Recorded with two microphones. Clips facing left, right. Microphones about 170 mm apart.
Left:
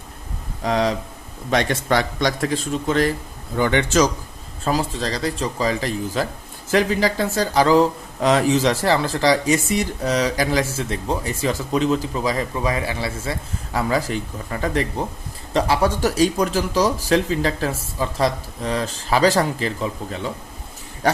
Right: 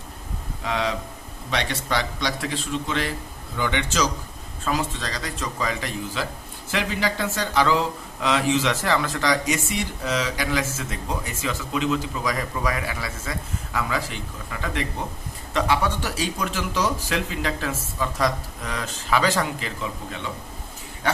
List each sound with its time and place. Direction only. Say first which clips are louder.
0.6 s a man's voice: left 6 dB; 40° left (ahead or behind)
4.6 s speech: left 4 dB; 35° left (ahead or behind)
13.7 s speech: left 6 dB; 40° left (ahead or behind)